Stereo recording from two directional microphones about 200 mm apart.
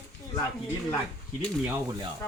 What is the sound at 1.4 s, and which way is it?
Speech, 20° right (ahead or behind).